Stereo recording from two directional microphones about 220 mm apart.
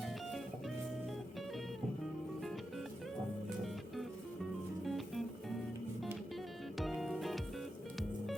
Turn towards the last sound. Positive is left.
turn(degrees=0)  # may be behind; listen again after turning